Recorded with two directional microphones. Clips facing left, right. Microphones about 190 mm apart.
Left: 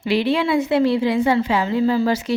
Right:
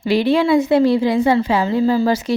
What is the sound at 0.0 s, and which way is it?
A woman's voice, 40° right (ahead or behind).